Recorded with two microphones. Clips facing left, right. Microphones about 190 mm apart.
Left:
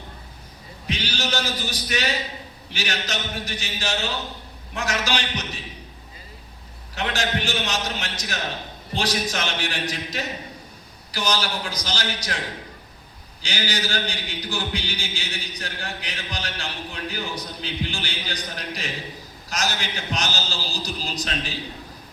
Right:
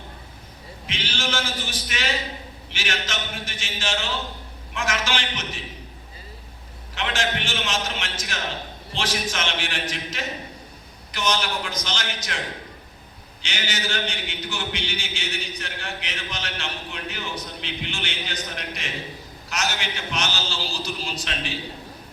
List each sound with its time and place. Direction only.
0.9 s a man's voice: 35° left (ahead or behind)
6.9 s a man's voice: 35° left (ahead or behind)
13.4 s a man's voice: 35° left (ahead or behind)